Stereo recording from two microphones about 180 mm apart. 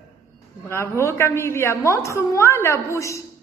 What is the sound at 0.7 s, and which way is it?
A woman's voice, 15° left (ahead or behind).